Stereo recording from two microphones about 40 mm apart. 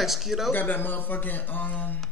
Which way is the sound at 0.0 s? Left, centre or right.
Centre.